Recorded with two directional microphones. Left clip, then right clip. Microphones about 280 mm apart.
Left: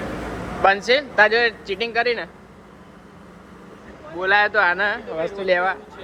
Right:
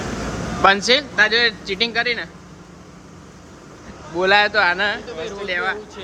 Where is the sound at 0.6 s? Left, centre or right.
Centre.